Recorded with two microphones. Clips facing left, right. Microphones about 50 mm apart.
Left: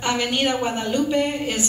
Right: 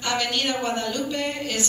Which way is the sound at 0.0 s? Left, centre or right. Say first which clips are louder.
Left 3 dB; left.